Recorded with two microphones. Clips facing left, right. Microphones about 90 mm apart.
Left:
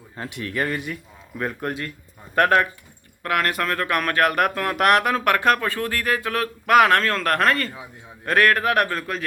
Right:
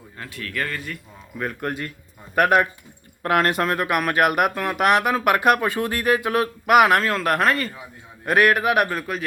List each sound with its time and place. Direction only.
0.2 s speech: 20° left (ahead or behind)
1.4 s speech: centre (ahead or behind)
2.3 s speech: 15° right (ahead or behind)
3.2 s speech: 25° right (ahead or behind); by 9.2 s 5° right (ahead or behind)